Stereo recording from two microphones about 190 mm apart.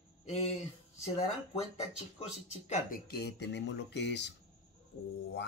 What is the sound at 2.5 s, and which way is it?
Speech, 40° left (ahead or behind).